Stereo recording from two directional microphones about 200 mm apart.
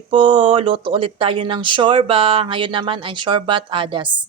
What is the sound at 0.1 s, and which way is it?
Speech, 25° right (ahead or behind).